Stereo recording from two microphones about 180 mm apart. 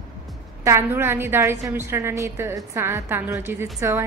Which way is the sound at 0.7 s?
15° right (ahead or behind).